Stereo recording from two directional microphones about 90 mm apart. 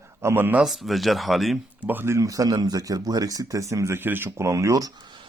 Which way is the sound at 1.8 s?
25° right (ahead or behind).